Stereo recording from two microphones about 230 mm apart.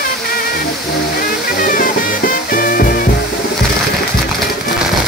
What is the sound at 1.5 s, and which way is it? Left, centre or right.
Music, left.